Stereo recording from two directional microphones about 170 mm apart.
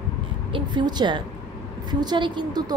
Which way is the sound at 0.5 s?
30° right (ahead or behind).